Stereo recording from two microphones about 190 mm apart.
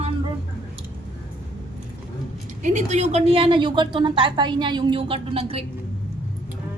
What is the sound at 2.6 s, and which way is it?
A woman's voice, 40° right (ahead or behind).